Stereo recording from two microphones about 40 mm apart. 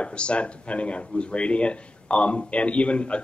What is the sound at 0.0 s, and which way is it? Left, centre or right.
Speech, left.